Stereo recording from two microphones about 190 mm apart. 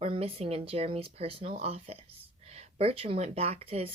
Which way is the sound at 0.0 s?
30° right (ahead or behind).